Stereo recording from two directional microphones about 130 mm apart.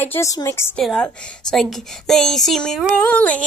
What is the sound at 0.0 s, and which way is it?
Speech, 15° left (ahead or behind).